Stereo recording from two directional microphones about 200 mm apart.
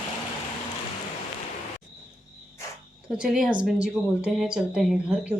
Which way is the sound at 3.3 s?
5° right (ahead or behind).